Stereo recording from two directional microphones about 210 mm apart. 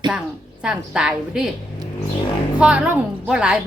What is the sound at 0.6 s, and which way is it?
Speech, 5° right (ahead or behind).